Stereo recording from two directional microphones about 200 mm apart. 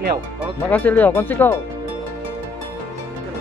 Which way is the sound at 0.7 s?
10° left (ahead or behind).